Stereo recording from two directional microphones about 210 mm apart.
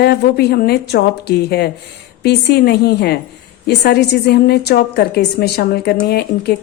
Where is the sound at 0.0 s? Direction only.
50° left (ahead or behind).